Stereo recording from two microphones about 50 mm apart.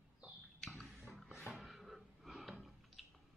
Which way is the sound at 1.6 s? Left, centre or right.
Centre.